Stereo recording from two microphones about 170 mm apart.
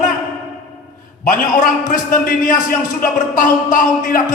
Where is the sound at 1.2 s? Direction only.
55° left (ahead or behind).